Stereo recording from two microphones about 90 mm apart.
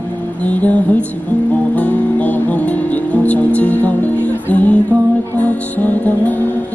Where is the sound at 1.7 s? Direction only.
15° left (ahead or behind).